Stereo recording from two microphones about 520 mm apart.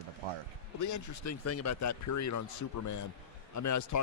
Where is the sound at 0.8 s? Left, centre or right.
Left.